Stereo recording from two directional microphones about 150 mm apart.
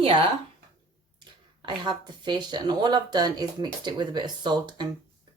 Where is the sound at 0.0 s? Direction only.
40° right (ahead or behind).